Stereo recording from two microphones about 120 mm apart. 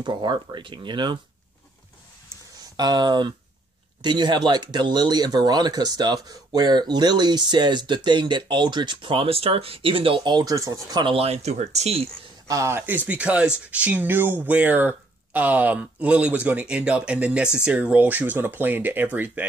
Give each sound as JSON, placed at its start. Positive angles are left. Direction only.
{"t": 0.0, "sound": "speech", "side_deg": -40}
{"t": 2.8, "sound": "speech", "side_deg": -35}
{"t": 11.1, "sound": "speech", "side_deg": -55}
{"t": 12.4, "sound": "speech", "side_deg": -25}